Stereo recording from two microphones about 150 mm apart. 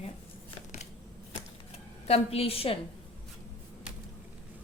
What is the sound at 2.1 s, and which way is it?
Speech, 40° left (ahead or behind).